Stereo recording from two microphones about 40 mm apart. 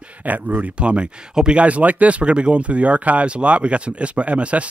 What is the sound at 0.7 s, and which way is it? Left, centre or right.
Speech, right.